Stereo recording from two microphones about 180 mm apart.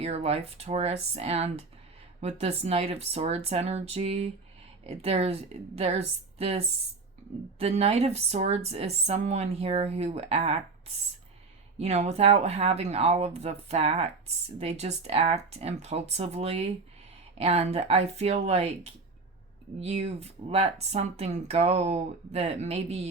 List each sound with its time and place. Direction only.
0.0 s a woman's voice: 35° right (ahead or behind)
11.8 s a woman's voice: 35° right (ahead or behind)